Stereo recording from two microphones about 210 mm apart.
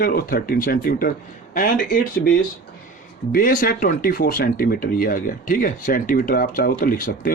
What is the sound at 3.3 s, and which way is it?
Speech, 45° left (ahead or behind).